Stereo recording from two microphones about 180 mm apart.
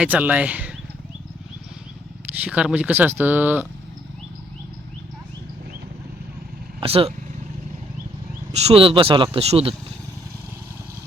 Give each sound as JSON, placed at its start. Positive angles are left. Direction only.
{"t": 0.0, "sound": "speech", "side_deg": -10}
{"t": 2.4, "sound": "speech", "side_deg": -5}
{"t": 6.7, "sound": "speech", "side_deg": -30}
{"t": 8.5, "sound": "speech", "side_deg": -35}